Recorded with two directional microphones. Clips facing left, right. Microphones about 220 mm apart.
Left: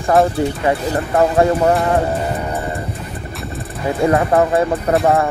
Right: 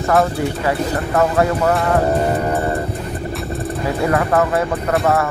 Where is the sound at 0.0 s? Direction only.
30° left (ahead or behind).